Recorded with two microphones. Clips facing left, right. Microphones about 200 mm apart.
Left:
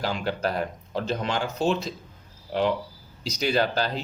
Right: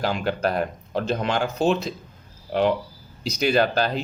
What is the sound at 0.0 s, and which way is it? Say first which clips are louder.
Speech: right 3 dB; 55° right (ahead or behind).